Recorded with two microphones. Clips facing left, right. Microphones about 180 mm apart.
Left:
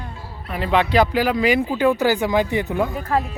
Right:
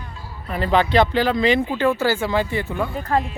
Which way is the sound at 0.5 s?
Centre (ahead or behind).